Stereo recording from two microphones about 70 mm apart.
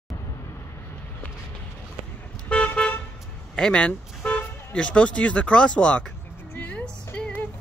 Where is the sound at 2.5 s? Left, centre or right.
Centre.